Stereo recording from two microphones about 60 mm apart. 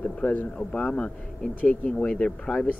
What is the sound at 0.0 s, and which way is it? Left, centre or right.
Speech, left.